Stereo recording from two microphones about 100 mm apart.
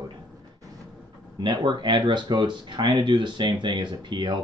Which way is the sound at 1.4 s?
50° right (ahead or behind).